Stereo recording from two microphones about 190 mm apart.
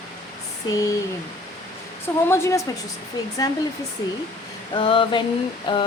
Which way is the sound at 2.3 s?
15° left (ahead or behind).